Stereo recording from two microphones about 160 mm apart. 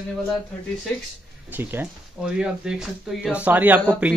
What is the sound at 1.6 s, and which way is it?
Speech, 15° right (ahead or behind).